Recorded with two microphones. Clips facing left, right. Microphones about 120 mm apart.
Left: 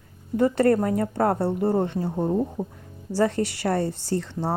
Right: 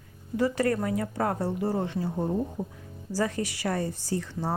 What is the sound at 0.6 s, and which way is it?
Speech, 40° left (ahead or behind).